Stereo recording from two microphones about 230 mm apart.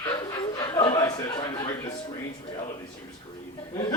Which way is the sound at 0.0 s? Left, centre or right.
Centre.